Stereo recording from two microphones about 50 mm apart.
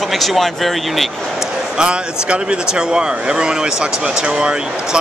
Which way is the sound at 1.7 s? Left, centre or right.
Centre.